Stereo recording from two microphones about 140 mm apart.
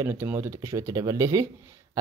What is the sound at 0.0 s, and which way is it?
Speech, 15° right (ahead or behind).